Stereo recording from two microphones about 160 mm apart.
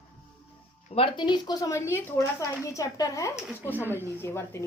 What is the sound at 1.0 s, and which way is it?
Speech, 30° left (ahead or behind).